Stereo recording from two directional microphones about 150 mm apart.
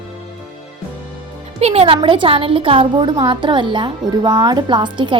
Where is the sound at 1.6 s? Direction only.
40° right (ahead or behind).